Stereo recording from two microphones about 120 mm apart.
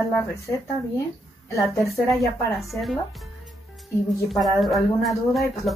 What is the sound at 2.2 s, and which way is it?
Speech, centre (ahead or behind).